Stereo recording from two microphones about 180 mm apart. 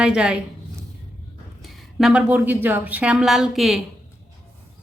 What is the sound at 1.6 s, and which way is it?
A woman's voice, centre (ahead or behind).